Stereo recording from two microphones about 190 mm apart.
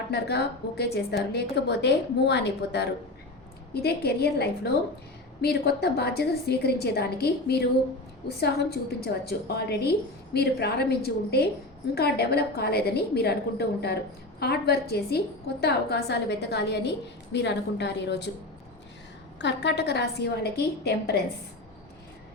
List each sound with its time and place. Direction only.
0.1 s a woman's voice: 60° left (ahead or behind)
19.4 s a woman's voice: 65° left (ahead or behind)